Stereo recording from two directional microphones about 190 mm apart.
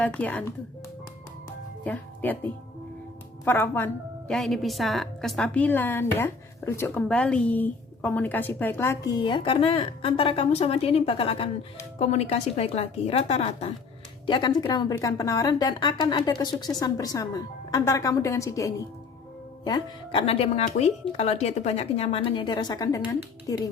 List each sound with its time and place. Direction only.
0.0 s a woman's voice: 5° left (ahead or behind)
1.8 s a woman's voice: 10° left (ahead or behind)
9.2 s a woman's voice: 25° left (ahead or behind)